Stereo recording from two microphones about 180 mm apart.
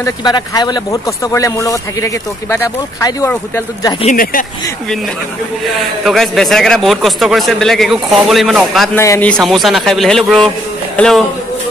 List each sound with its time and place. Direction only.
0.0 s speech: 20° left (ahead or behind)
4.0 s speech: 50° left (ahead or behind)
5.8 s a man's voice: centre (ahead or behind)
8.9 s speech: 15° left (ahead or behind)
9.3 s a man's voice: centre (ahead or behind)